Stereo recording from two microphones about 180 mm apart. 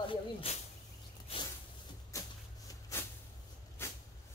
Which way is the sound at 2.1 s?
20° left (ahead or behind).